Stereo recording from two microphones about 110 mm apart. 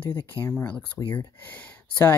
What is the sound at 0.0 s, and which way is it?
Speech, 45° left (ahead or behind).